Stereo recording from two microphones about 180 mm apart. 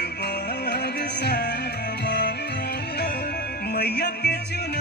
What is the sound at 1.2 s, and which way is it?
Music, 65° left (ahead or behind).